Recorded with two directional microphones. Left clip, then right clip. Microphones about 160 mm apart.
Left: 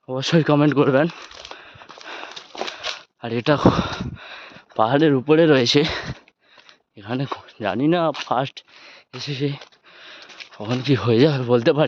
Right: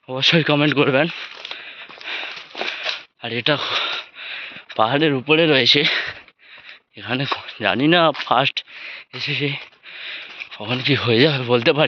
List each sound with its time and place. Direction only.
0.1 s speech: 40° left (ahead or behind)
2.1 s walk: 40° left (ahead or behind)
3.2 s speech: 50° left (ahead or behind)
4.8 s speech: 40° left (ahead or behind)
7.0 s speech: 25° left (ahead or behind); by 8.3 s centre (ahead or behind)
8.3 s speech: 15° left (ahead or behind)
8.8 s a sound: 30° left (ahead or behind)
10.5 s speech: 50° left (ahead or behind); by 11.9 s 30° left (ahead or behind)